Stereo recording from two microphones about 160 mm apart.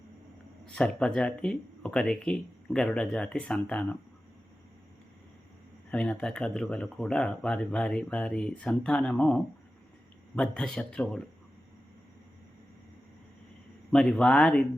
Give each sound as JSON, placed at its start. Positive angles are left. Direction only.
{"t": 0.7, "sound": "speech", "side_deg": 5}
{"t": 5.9, "sound": "speech", "side_deg": 5}
{"t": 13.9, "sound": "speech", "side_deg": 5}